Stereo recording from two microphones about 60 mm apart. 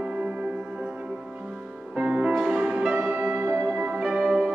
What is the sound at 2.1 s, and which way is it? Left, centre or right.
Music, centre.